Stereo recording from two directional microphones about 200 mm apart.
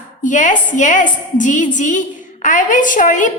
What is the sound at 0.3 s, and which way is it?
A woman's voice, 40° left (ahead or behind).